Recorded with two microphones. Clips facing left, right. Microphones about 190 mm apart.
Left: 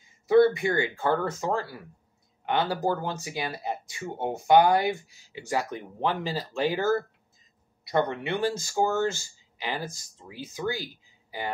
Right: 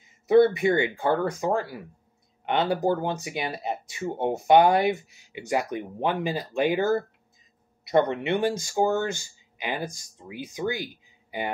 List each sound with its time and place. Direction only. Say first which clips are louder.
0.0 s speech: right 1 dB; 20° right (ahead or behind)